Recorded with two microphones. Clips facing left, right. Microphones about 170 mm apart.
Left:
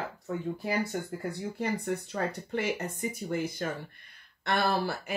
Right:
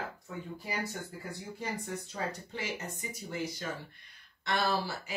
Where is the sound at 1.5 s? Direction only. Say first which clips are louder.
Left 6 dB; 60° left (ahead or behind).